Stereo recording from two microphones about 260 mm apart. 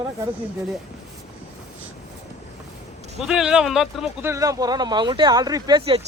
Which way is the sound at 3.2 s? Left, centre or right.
Centre.